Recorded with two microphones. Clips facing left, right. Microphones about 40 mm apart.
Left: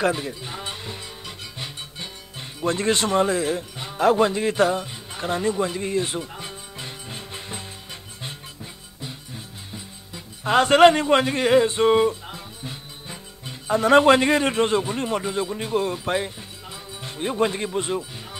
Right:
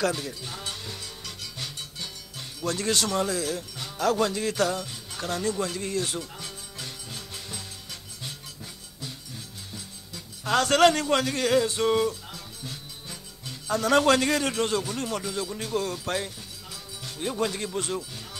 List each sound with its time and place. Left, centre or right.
0.0 s speech: left
9.0 s speech: left